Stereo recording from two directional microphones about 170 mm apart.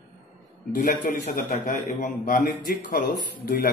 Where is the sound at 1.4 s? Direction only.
45° left (ahead or behind).